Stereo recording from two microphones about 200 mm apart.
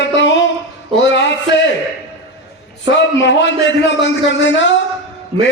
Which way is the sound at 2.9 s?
60° left (ahead or behind).